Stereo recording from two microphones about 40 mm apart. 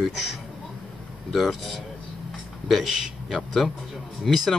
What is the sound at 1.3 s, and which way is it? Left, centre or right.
Speech, centre.